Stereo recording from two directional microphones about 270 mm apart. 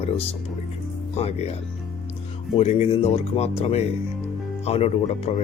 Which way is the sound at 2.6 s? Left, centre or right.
Left.